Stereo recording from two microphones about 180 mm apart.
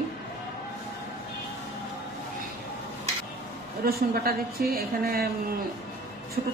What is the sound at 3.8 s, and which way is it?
A woman's voice, 55° right (ahead or behind).